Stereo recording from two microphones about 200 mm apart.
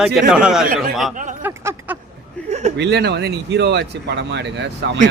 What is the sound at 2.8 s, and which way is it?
Speech, 55° right (ahead or behind).